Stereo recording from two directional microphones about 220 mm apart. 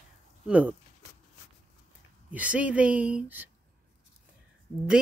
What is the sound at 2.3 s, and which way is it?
Speech, 5° right (ahead or behind).